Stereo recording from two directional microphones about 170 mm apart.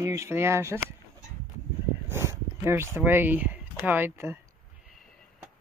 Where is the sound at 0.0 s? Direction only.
20° right (ahead or behind).